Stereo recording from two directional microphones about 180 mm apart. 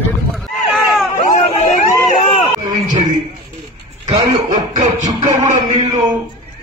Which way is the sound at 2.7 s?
25° right (ahead or behind).